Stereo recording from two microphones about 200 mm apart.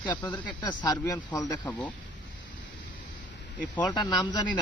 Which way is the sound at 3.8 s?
20° left (ahead or behind).